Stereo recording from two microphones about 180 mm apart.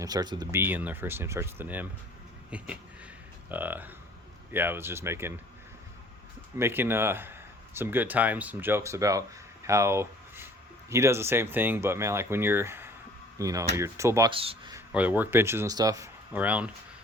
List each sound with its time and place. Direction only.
0.0 s speech: 20° right (ahead or behind)
0.6 s speech: 10° right (ahead or behind)
6.6 s speech: 10° right (ahead or behind)
14.3 s speech: 30° right (ahead or behind)
14.9 s speech: 10° right (ahead or behind)